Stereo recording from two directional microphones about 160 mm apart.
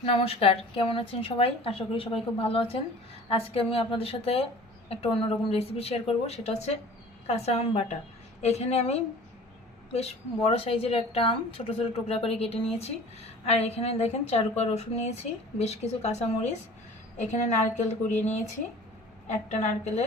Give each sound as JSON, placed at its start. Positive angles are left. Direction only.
{"t": 0.0, "sound": "a woman's voice", "side_deg": 35}